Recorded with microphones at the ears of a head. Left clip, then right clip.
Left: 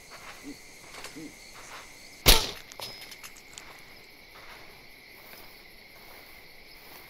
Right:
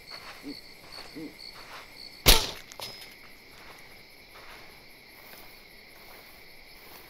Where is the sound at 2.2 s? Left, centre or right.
Centre.